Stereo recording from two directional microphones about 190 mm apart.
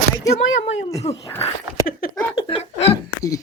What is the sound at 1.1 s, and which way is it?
Speech, 35° left (ahead or behind).